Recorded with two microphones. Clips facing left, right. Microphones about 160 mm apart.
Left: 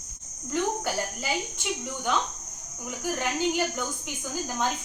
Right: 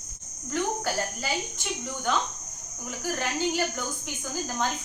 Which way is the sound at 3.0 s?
15° left (ahead or behind).